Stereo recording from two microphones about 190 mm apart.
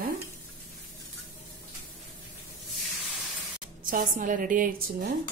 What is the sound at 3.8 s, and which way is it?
A woman's voice, 45° right (ahead or behind).